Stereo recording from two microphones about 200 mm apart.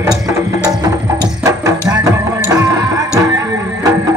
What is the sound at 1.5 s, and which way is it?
Music, 15° right (ahead or behind).